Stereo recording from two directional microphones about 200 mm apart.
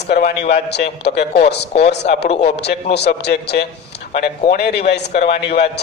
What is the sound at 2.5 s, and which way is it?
A man's voice, 55° left (ahead or behind).